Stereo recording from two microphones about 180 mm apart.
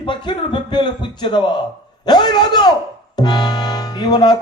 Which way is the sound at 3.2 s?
25° left (ahead or behind).